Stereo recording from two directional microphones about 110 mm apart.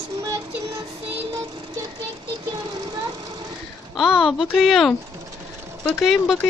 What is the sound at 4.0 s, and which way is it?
Speech, 5° right (ahead or behind).